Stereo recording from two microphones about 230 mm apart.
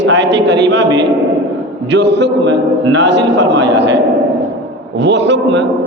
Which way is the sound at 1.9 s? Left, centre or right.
Right.